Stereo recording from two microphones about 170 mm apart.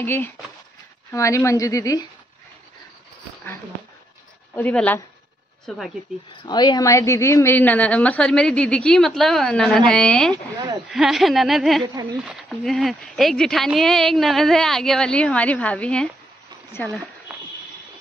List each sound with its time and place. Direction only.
0.0 s a woman's voice: 15° left (ahead or behind)
4.6 s a woman's voice: 10° left (ahead or behind)
6.1 s a woman's voice: 5° right (ahead or behind)
6.4 s a woman's voice: 25° left (ahead or behind); by 16.1 s 5° left (ahead or behind)